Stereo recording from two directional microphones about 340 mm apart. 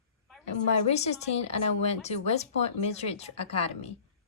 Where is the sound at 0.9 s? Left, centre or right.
Centre.